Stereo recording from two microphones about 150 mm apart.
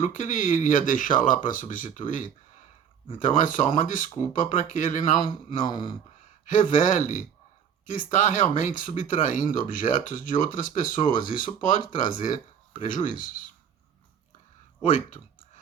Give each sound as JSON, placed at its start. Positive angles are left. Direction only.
{"t": 0.2, "sound": "speech", "side_deg": 60}
{"t": 5.6, "sound": "speech", "side_deg": 30}
{"t": 6.4, "sound": "speech", "side_deg": 55}
{"t": 14.8, "sound": "clicking", "side_deg": 55}